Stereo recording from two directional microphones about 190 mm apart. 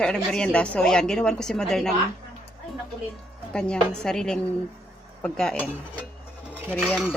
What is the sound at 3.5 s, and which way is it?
A woman's voice, 5° left (ahead or behind).